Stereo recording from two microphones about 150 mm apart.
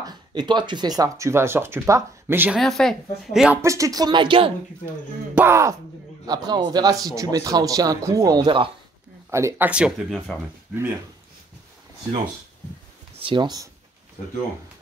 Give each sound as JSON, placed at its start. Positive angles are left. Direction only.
{"t": 0.0, "sound": "speech", "side_deg": -30}
{"t": 2.6, "sound": "speech", "side_deg": 0}
{"t": 3.6, "sound": "speech", "side_deg": -20}
{"t": 5.3, "sound": "speech", "side_deg": -15}
{"t": 8.5, "sound": "speech", "side_deg": -35}
{"t": 9.3, "sound": "speech", "side_deg": -20}
{"t": 9.7, "sound": "speech", "side_deg": -5}
{"t": 13.2, "sound": "speech", "side_deg": -30}